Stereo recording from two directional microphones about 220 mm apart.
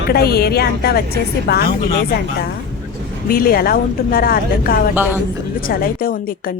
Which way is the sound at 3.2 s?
40° left (ahead or behind).